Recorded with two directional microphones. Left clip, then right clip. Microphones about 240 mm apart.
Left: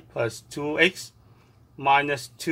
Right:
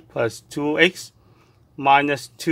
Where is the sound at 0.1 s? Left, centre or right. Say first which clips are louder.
Right 4 dB; right.